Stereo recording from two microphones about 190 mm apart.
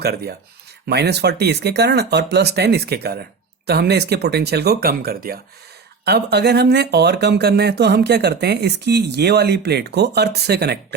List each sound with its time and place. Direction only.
0.0 s speech: 55° right (ahead or behind)